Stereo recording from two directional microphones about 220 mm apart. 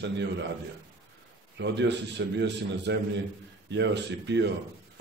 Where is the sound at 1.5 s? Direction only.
55° right (ahead or behind).